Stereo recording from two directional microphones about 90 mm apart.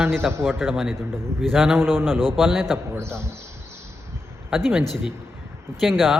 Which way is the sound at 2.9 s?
30° right (ahead or behind).